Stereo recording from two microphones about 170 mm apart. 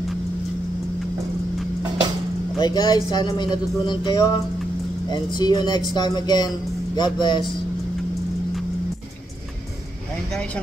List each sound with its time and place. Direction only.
2.6 s speech: 25° left (ahead or behind)